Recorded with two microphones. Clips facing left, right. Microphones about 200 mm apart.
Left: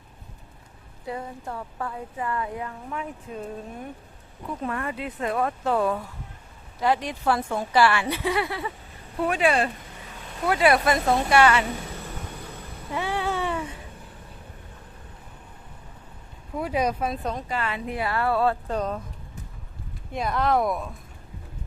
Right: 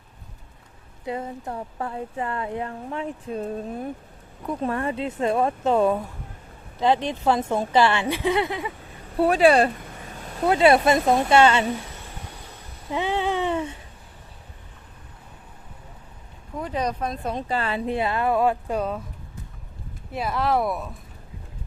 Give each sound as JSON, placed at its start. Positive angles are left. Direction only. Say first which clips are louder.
{"t": 1.0, "sound": "speech", "louder": "right 3 dB", "side_deg": -20}
{"t": 9.1, "sound": "speech", "louder": "right 6 dB", "side_deg": -35}
{"t": 10.4, "sound": "speech", "louder": "right 4 dB", "side_deg": -25}
{"t": 12.9, "sound": "a sound", "louder": "right 3 dB", "side_deg": -20}
{"t": 16.6, "sound": "speech", "louder": "left 2 dB", "side_deg": 10}
{"t": 17.3, "sound": "speech", "louder": "right 4 dB", "side_deg": -30}
{"t": 20.1, "sound": "speech", "louder": "even", "side_deg": -5}